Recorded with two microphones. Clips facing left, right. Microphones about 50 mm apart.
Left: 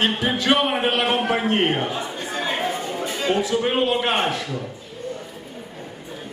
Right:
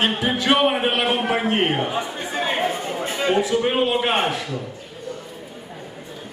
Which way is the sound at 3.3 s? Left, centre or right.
Centre.